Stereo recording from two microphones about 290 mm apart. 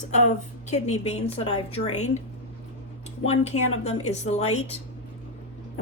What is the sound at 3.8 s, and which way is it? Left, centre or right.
Speech, left.